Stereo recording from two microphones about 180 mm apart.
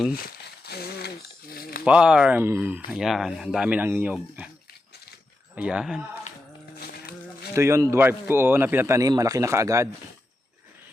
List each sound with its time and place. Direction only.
0.1 s crumpling: 60° left (ahead or behind)
1.5 s a sound: 55° left (ahead or behind)
1.8 s speech: 5° right (ahead or behind)
5.5 s speech: 5° right (ahead or behind)
6.7 s a sound: 60° left (ahead or behind)
7.5 s speech: 15° right (ahead or behind)